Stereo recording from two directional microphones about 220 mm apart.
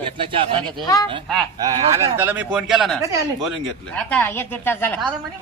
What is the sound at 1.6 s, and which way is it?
Speech, 20° right (ahead or behind).